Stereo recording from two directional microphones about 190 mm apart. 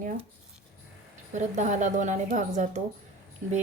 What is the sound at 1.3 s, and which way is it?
A woman's voice, 40° right (ahead or behind).